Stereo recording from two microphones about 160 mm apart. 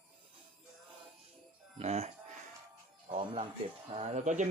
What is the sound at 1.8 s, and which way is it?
Speech, 40° right (ahead or behind).